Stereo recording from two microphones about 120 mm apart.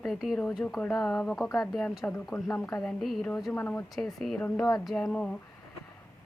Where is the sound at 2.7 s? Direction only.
5° left (ahead or behind).